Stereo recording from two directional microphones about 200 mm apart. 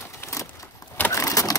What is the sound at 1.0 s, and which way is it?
Vehicle, 15° left (ahead or behind).